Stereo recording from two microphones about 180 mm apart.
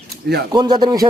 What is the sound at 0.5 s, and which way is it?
Speech, 20° right (ahead or behind).